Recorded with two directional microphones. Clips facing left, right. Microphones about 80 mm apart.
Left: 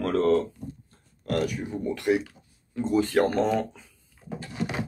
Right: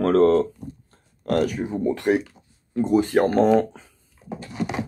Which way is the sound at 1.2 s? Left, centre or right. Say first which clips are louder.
Right 5 dB; right.